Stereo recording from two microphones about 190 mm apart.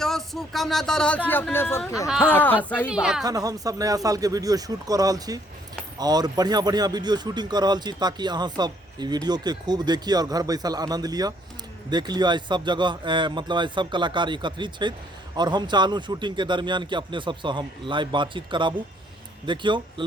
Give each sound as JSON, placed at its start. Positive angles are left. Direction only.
{"t": 0.0, "sound": "speech", "side_deg": 0}
{"t": 2.0, "sound": "a woman's voice", "side_deg": -5}
{"t": 2.3, "sound": "speech", "side_deg": 10}
{"t": 2.9, "sound": "a woman's voice", "side_deg": -5}
{"t": 3.2, "sound": "speech", "side_deg": -20}